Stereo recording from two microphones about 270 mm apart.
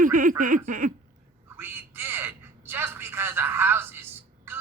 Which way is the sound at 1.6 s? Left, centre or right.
Centre.